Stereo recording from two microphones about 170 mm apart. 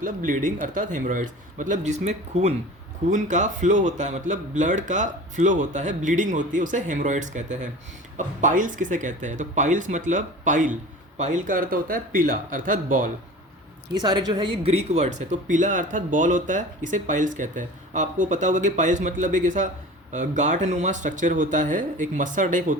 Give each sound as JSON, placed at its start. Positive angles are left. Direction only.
{"t": 0.0, "sound": "speech", "side_deg": -50}
{"t": 14.0, "sound": "speech", "side_deg": -25}